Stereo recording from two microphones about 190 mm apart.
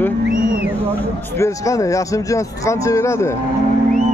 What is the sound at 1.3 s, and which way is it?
Speech, 15° left (ahead or behind).